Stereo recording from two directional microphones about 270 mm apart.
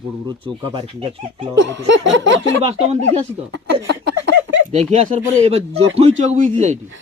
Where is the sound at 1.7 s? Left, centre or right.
Right.